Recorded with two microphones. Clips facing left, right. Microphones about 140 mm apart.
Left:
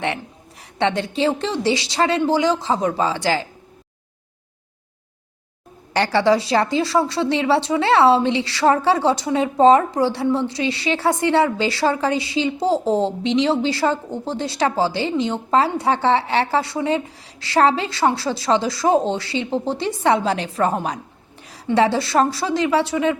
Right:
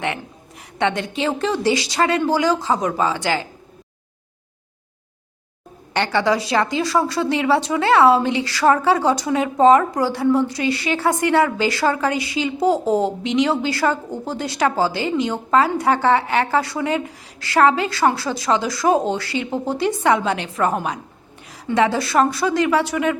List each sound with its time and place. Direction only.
0.8 s a woman's voice: 30° left (ahead or behind)
5.9 s a woman's voice: 35° left (ahead or behind)